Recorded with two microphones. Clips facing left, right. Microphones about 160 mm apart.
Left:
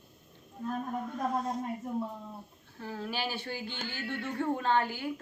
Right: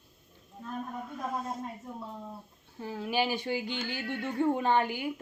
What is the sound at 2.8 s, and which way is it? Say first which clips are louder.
A woman's voice: right 5 dB; 15° right (ahead or behind).